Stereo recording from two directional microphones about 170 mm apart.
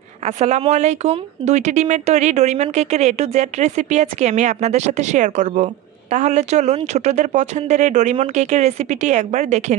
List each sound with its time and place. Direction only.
0.2 s speech: 40° right (ahead or behind)